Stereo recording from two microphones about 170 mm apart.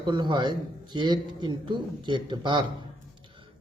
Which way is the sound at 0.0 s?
25° right (ahead or behind).